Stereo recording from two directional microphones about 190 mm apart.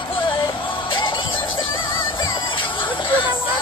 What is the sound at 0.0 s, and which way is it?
Music, 25° left (ahead or behind).